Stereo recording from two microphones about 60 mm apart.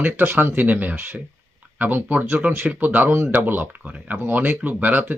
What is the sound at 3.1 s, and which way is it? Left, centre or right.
Speech, right.